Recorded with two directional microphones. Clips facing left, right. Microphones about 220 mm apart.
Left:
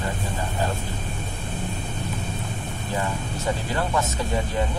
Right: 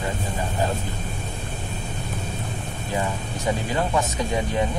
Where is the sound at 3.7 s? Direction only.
15° right (ahead or behind).